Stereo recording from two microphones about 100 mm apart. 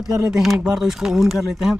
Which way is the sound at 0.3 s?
Centre (ahead or behind).